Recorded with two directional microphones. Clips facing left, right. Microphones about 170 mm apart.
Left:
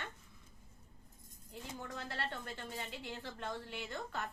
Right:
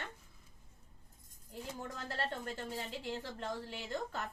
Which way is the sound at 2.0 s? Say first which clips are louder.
Right 3 dB; 40° right (ahead or behind).